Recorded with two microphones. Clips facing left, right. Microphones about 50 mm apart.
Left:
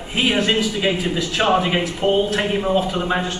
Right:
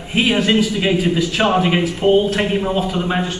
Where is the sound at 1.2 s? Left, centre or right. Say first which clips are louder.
Right 2 dB; centre.